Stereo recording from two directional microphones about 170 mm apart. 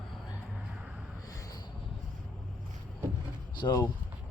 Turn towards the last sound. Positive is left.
turn(degrees=20)  # may be behind; listen again after turning